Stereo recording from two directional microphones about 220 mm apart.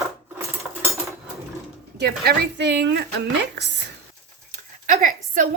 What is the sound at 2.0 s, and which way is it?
Speech, 50° right (ahead or behind).